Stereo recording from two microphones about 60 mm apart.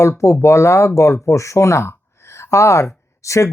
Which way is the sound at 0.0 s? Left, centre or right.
Left.